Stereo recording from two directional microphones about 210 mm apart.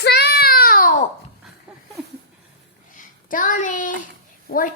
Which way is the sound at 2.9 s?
40° left (ahead or behind).